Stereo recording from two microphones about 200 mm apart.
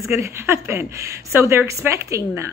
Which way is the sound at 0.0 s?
15° right (ahead or behind).